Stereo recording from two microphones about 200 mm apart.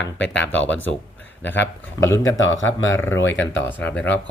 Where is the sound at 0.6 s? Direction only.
10° left (ahead or behind).